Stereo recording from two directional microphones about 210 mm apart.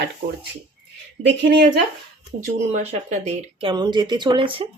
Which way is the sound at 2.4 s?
30° right (ahead or behind).